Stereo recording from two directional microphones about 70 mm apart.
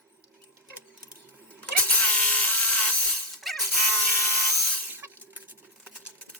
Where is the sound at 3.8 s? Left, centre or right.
Left.